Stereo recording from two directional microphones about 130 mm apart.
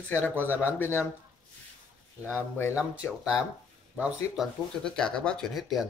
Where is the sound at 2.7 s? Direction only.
5° right (ahead or behind).